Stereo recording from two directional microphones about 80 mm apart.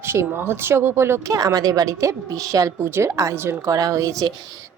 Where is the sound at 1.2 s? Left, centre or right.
Right.